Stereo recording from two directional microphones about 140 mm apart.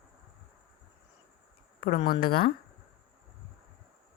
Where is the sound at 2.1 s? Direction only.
90° left.